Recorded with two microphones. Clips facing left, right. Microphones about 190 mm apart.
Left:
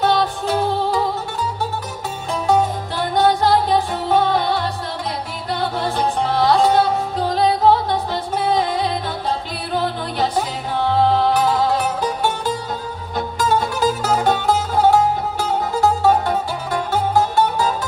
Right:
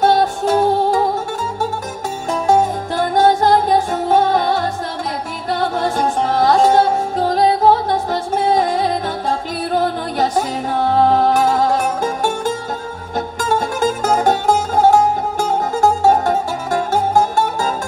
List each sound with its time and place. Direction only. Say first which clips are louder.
0.0 s music: right 4 dB; 45° right (ahead or behind)
2.2 s music: right 3 dB; 45° right (ahead or behind)